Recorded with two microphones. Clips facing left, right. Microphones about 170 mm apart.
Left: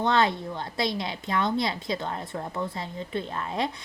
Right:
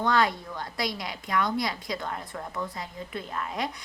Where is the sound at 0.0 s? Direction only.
25° left (ahead or behind).